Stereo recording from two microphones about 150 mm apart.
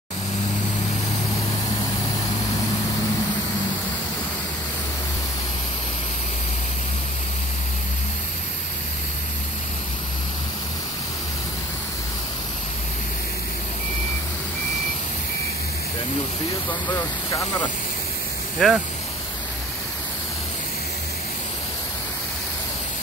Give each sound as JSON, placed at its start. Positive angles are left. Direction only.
{"t": 16.9, "sound": "speech", "side_deg": 20}
{"t": 18.6, "sound": "speech", "side_deg": 5}